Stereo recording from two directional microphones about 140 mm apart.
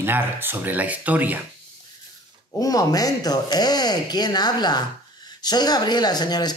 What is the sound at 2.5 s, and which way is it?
Speech, 25° left (ahead or behind).